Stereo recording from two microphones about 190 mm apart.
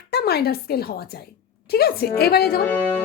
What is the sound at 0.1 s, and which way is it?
Speech, 55° left (ahead or behind).